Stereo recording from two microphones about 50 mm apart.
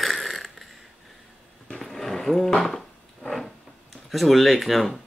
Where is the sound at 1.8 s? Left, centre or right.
Centre.